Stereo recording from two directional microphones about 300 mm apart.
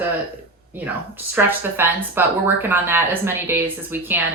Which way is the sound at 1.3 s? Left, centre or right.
Centre.